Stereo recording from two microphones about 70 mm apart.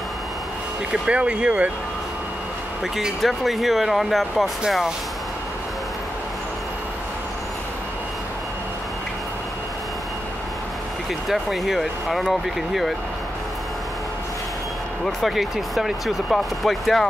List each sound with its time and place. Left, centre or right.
0.9 s speech: centre
3.0 s speech: centre
11.2 s speech: centre
15.0 s speech: centre